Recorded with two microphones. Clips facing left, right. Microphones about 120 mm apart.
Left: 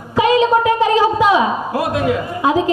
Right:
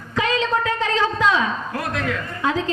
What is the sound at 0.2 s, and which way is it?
A man's voice, 15° left (ahead or behind).